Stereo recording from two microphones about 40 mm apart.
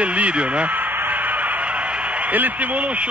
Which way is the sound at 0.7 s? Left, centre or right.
Right.